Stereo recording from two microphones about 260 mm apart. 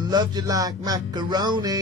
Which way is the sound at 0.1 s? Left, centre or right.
Centre.